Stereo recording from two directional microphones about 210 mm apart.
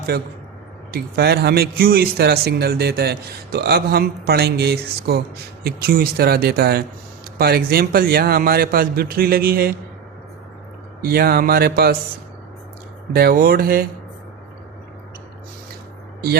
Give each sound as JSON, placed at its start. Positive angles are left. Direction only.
{"t": 0.1, "sound": "speech", "side_deg": -50}
{"t": 11.1, "sound": "speech", "side_deg": -45}
{"t": 13.1, "sound": "speech", "side_deg": -45}